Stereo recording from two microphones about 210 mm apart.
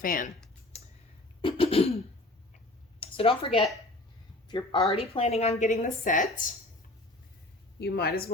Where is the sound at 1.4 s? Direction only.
25° left (ahead or behind).